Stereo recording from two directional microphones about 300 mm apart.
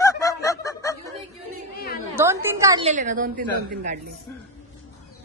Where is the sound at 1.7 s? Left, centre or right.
Left.